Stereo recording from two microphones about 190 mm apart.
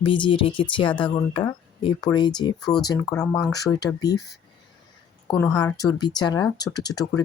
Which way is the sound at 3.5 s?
20° left (ahead or behind).